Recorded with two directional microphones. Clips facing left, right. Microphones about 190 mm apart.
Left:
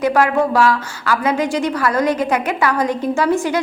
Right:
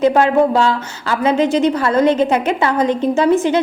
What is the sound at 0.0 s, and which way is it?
A woman's voice, 25° right (ahead or behind).